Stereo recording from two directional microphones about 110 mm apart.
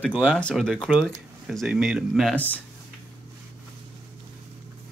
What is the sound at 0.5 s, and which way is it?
Speech, 5° left (ahead or behind).